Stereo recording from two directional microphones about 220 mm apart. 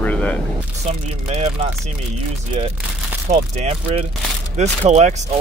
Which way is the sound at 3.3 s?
30° right (ahead or behind).